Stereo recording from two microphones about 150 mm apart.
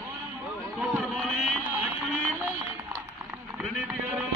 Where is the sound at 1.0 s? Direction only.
5° right (ahead or behind).